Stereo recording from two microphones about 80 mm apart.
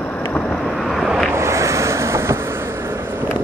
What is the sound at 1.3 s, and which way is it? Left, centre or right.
Vehicle, right.